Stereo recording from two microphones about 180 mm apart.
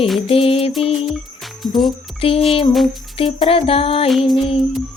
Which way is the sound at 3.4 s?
30° left (ahead or behind).